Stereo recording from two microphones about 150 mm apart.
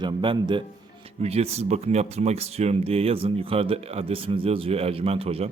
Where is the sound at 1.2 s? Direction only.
45° right (ahead or behind).